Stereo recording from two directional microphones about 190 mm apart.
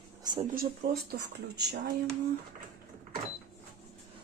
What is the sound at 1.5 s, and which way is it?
Speech, 60° right (ahead or behind).